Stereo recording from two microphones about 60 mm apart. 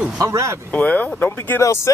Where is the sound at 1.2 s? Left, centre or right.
Left.